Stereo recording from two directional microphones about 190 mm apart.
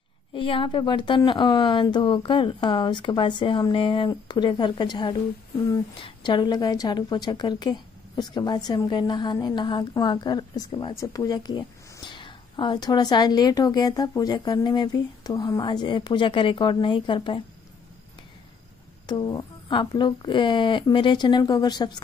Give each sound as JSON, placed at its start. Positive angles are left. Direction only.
{"t": 0.3, "sound": "a woman's voice", "side_deg": 25}
{"t": 19.0, "sound": "a woman's voice", "side_deg": 20}